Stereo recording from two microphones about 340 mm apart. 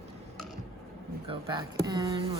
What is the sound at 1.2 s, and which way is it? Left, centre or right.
Speech, centre.